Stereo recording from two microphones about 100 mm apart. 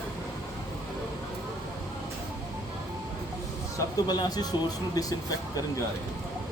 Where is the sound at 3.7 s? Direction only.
40° left (ahead or behind).